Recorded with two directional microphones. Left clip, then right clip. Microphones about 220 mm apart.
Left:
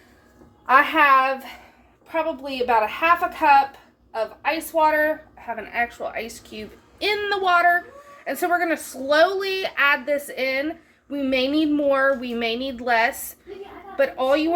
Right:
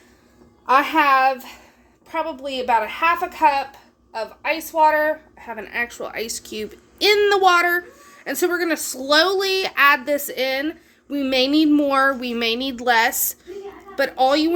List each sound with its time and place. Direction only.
0.6 s a woman's voice: 45° right (ahead or behind)